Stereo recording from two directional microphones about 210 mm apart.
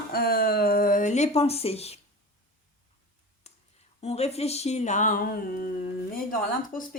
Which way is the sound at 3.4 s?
30° left (ahead or behind).